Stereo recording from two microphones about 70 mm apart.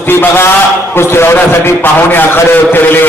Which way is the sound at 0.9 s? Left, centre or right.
Left.